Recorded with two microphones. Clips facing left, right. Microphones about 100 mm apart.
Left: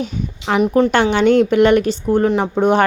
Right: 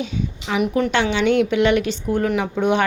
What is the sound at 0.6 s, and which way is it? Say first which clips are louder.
Speech: left 5 dB; 40° left (ahead or behind).